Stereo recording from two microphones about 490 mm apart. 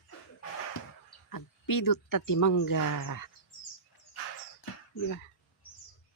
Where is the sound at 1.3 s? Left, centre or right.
Left.